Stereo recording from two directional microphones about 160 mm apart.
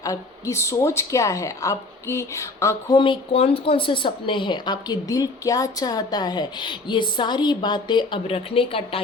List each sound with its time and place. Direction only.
0.0 s a woman's voice: 20° left (ahead or behind)
3.0 s a woman's voice: 35° left (ahead or behind)